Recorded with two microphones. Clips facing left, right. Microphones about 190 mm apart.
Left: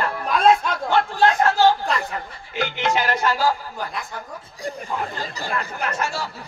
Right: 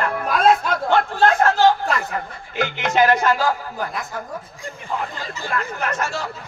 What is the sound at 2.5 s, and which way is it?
Speech, 50° right (ahead or behind).